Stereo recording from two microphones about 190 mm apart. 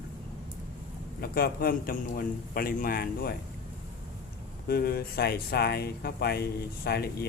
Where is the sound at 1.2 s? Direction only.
55° left (ahead or behind).